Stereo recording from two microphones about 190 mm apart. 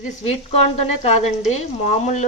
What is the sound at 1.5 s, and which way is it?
Speech, 35° left (ahead or behind).